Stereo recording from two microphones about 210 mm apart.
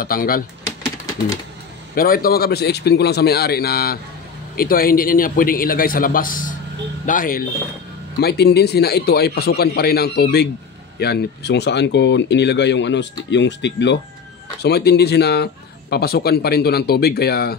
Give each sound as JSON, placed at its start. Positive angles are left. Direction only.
{"t": 0.0, "sound": "a man's voice", "side_deg": 45}
{"t": 2.0, "sound": "a man's voice", "side_deg": 45}